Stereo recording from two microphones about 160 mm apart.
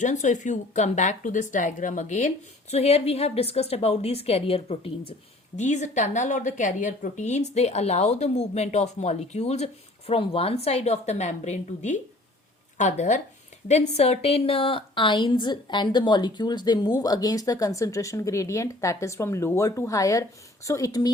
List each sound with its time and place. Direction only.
0.0 s speech: 50° left (ahead or behind)
5.5 s a woman's voice: 45° left (ahead or behind); by 21.1 s 20° left (ahead or behind)